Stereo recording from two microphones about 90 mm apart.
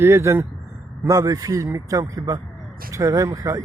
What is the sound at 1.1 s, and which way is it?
Speech, 40° right (ahead or behind).